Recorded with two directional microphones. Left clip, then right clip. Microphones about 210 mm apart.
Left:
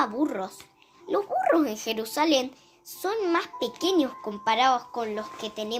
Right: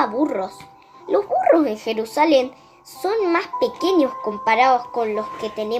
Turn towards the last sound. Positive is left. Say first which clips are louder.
# right 8 dB
turn(degrees=30)  # may be behind; listen again after turning